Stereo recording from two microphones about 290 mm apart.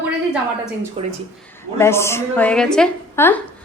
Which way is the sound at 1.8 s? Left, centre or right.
Centre.